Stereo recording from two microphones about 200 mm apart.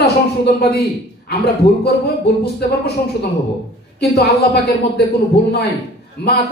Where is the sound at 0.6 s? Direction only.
50° left (ahead or behind).